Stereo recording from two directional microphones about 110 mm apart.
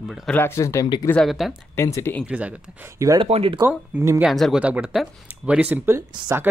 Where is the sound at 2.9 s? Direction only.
30° right (ahead or behind).